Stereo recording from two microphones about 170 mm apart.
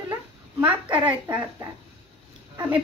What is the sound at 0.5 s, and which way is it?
Speech, 10° right (ahead or behind).